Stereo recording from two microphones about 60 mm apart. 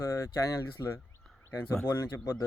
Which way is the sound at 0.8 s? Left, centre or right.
Left.